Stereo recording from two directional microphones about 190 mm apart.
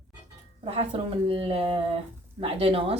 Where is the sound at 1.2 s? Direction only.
30° right (ahead or behind).